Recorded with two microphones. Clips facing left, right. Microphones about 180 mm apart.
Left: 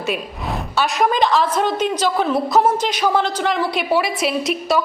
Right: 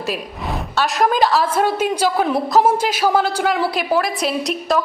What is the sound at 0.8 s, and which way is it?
A woman's voice, centre (ahead or behind).